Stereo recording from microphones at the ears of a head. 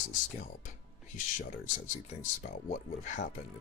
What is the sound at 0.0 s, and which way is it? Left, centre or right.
Speech, left.